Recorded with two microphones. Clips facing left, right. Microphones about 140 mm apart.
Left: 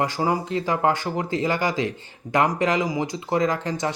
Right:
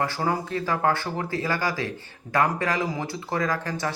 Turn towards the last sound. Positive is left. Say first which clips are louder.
# left 3 dB
turn(degrees=20)  # may be behind; listen again after turning